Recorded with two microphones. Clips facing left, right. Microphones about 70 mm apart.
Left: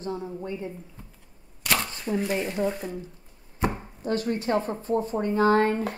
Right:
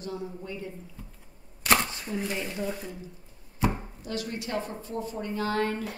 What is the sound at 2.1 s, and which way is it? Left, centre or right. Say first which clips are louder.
Speech: left 9 dB; left.